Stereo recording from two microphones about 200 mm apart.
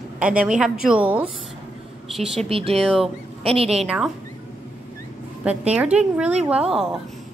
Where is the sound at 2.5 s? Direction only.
30° right (ahead or behind).